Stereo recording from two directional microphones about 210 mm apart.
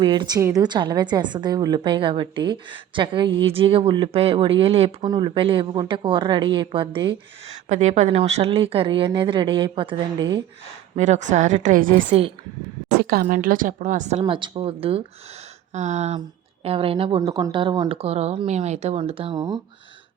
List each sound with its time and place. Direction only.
0.0 s speech: 20° right (ahead or behind)
7.7 s speech: 35° right (ahead or behind)
10.9 s a woman's voice: 35° right (ahead or behind)